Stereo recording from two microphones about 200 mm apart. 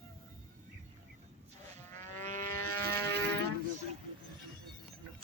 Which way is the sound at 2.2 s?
10° left (ahead or behind).